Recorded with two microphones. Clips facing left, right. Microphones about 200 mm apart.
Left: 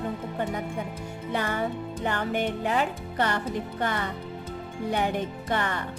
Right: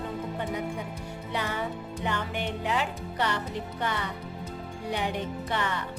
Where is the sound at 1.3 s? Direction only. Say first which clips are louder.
Left 4 dB; 45° left (ahead or behind).